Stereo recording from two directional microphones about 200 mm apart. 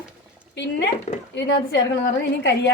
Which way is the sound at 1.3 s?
60° left (ahead or behind).